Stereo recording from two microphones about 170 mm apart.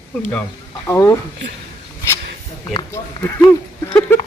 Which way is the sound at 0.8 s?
15° left (ahead or behind).